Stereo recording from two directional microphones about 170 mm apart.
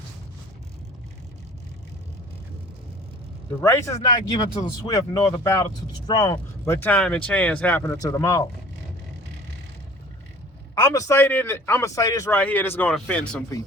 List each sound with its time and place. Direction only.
3.6 s speech: 15° left (ahead or behind)
6.8 s a man's voice: 5° left (ahead or behind)
10.8 s a man's voice: 20° left (ahead or behind)